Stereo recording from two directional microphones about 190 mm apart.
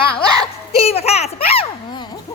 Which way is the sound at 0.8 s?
35° left (ahead or behind).